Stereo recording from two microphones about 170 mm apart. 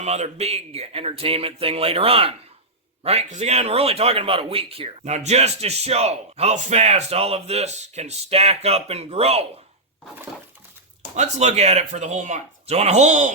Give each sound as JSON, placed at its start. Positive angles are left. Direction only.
{"t": 0.0, "sound": "speech", "side_deg": -40}
{"t": 11.1, "sound": "speech", "side_deg": -40}